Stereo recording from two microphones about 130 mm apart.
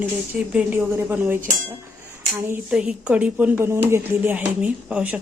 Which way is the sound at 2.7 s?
5° right (ahead or behind).